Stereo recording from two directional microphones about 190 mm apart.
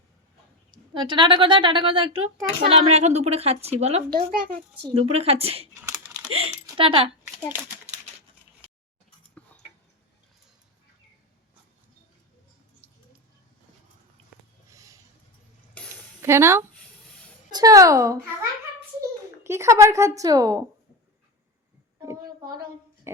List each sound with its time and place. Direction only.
0.7 s a woman's voice: 25° right (ahead or behind)
4.1 s speech: 50° right (ahead or behind)
4.8 s a woman's voice: 30° right (ahead or behind)
6.0 s typing: 15° right (ahead or behind)
6.7 s speech: 30° right (ahead or behind)
14.7 s a sound: 15° right (ahead or behind)
16.2 s a woman's voice: 15° right (ahead or behind)
19.4 s a woman's voice: 15° right (ahead or behind)
22.0 s a sound: 15° right (ahead or behind)
23.1 s music: 15° right (ahead or behind)